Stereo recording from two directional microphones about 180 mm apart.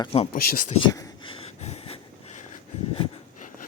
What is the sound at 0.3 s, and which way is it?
Speech, 45° left (ahead or behind).